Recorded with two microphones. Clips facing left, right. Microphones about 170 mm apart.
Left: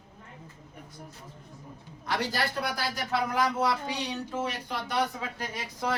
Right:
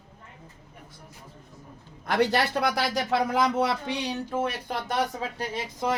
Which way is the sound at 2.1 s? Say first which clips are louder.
Right 7 dB; 65° right (ahead or behind).